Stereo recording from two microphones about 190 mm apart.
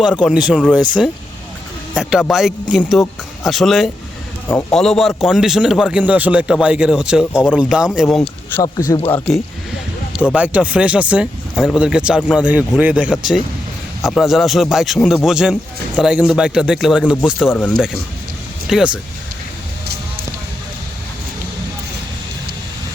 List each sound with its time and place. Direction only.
0.2 s speech: 5° right (ahead or behind)
2.0 s speech: 5° right (ahead or behind); by 9.0 s 20° left (ahead or behind)
9.0 s speech: 5° left (ahead or behind)
10.3 s speech: 5° right (ahead or behind)
17.5 s speech: 5° left (ahead or behind)